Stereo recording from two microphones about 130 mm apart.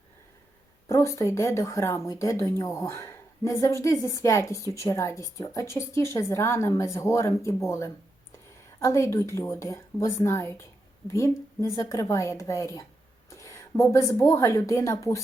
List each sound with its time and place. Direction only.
0.9 s a woman's voice: 20° left (ahead or behind)